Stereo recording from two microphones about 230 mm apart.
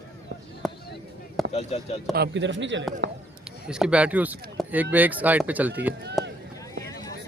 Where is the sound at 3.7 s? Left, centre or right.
Centre.